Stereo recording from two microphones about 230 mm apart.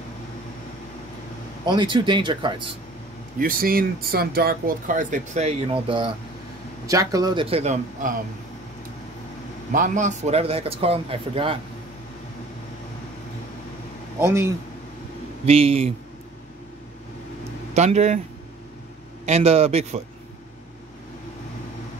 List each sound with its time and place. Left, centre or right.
1.7 s speech: right
3.3 s speech: right
9.7 s speech: right
14.2 s speech: centre
15.4 s speech: right
17.7 s speech: right
19.2 s speech: right